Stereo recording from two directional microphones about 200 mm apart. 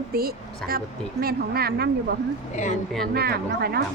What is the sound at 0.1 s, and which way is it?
A woman's voice, 50° right (ahead or behind).